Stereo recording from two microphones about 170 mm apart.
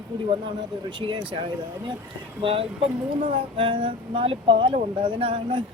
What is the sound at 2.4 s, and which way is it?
Speech, 35° right (ahead or behind).